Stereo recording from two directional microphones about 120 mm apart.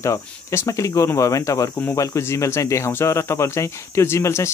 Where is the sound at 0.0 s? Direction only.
25° left (ahead or behind).